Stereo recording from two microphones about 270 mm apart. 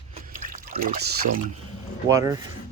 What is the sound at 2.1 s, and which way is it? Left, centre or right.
Speech, centre.